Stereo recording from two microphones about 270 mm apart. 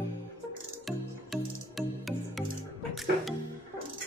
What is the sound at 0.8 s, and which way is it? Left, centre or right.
Music, centre.